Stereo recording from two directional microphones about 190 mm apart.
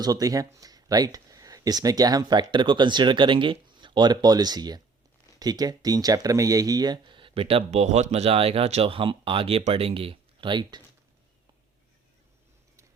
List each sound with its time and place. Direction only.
0.0 s speech: 20° right (ahead or behind)